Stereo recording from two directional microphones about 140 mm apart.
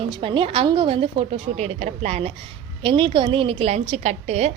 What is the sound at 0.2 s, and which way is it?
Speech, 40° right (ahead or behind).